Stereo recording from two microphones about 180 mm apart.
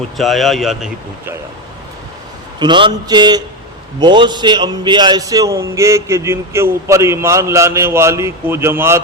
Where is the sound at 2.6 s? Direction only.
25° right (ahead or behind).